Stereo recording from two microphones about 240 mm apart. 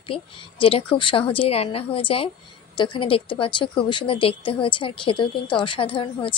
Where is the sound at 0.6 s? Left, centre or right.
Left.